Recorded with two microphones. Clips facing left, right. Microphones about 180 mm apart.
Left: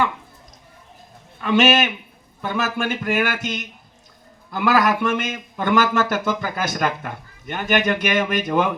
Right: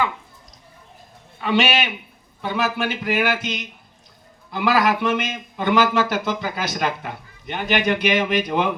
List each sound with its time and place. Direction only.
1.5 s speech: 45° left (ahead or behind)